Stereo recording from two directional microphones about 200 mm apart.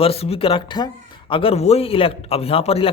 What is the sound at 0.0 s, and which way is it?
Speech, 30° left (ahead or behind).